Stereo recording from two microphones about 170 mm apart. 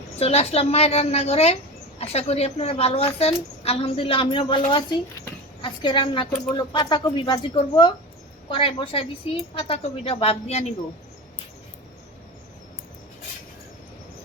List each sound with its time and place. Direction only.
0.2 s a woman's voice: 35° left (ahead or behind)